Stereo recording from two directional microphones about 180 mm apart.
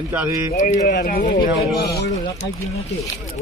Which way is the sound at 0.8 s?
55° left (ahead or behind).